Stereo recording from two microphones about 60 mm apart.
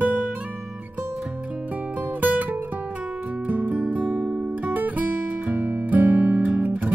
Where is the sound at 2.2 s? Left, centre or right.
Right.